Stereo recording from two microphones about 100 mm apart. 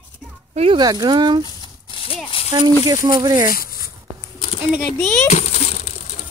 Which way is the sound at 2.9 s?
45° right (ahead or behind).